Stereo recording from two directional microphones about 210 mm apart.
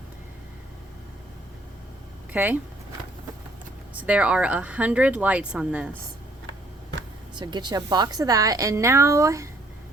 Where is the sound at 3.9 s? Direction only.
5° right (ahead or behind).